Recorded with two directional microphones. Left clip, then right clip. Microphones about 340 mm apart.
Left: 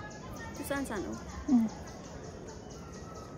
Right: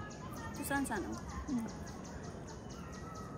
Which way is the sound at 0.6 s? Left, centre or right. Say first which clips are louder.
Left 1 dB; centre.